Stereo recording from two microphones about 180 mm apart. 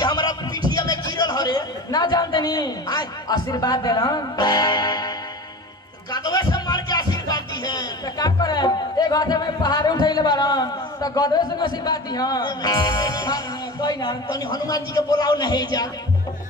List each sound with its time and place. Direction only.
0.0 s a sound: 20° left (ahead or behind)
0.7 s a man's voice: 20° left (ahead or behind)
6.1 s speech: 20° left (ahead or behind)